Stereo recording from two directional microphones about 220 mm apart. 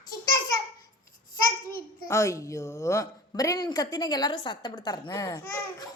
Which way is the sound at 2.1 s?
15° left (ahead or behind).